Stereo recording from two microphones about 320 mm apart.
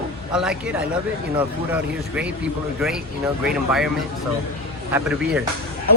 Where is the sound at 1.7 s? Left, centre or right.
Centre.